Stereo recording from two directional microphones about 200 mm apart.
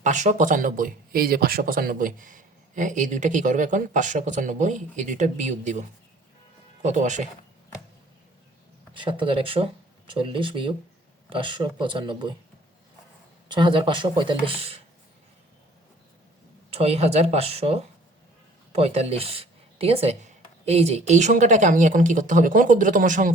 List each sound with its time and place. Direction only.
0.0 s speech: 35° right (ahead or behind)
6.8 s speech: 35° right (ahead or behind)
8.9 s speech: 25° right (ahead or behind)
13.5 s speech: 25° right (ahead or behind)
16.6 s speech: 30° right (ahead or behind)